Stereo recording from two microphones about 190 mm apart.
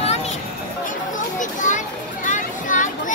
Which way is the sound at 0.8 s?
40° left (ahead or behind).